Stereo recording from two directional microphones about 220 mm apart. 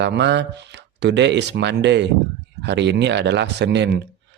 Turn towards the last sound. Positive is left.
turn(degrees=-50)  # may be behind; listen again after turning